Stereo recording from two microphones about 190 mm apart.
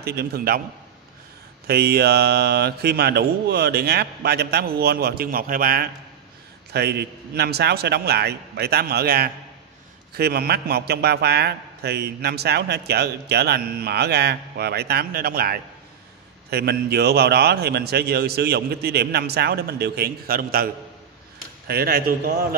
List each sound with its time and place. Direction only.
0.0 s a man's voice: 55° right (ahead or behind)
1.7 s a man's voice: 55° right (ahead or behind)